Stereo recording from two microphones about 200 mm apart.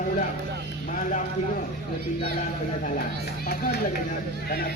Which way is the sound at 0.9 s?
40° left (ahead or behind).